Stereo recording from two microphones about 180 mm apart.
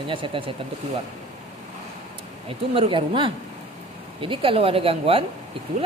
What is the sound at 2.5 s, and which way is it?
A woman's voice, 30° right (ahead or behind).